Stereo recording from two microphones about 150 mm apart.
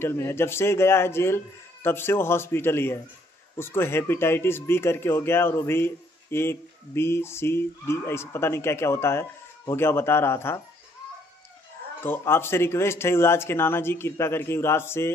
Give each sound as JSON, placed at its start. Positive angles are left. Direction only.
{"t": 0.0, "sound": "speech", "side_deg": 15}
{"t": 12.0, "sound": "speech", "side_deg": 15}